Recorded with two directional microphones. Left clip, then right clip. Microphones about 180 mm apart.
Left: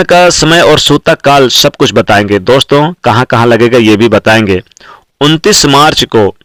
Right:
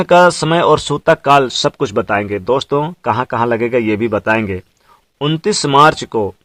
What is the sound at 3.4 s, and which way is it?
Speech, 35° left (ahead or behind).